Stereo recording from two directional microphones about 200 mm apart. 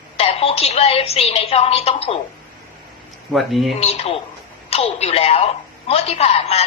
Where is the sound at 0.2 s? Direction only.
30° left (ahead or behind).